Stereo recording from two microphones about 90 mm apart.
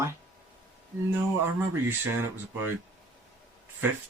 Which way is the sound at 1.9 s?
25° right (ahead or behind).